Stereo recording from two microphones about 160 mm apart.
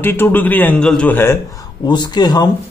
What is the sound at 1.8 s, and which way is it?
Speech, 25° left (ahead or behind).